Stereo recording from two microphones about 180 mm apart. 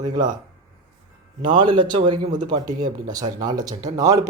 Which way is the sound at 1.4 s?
25° right (ahead or behind).